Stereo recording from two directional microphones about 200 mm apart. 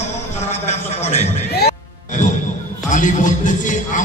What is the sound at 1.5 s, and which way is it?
Music, 55° left (ahead or behind).